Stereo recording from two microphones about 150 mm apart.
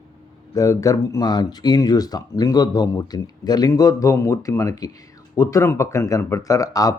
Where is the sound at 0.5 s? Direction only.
20° left (ahead or behind).